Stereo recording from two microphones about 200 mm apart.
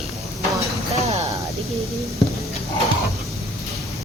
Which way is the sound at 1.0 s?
30° right (ahead or behind).